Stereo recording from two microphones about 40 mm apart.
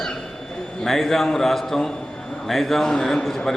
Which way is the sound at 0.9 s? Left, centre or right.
Centre.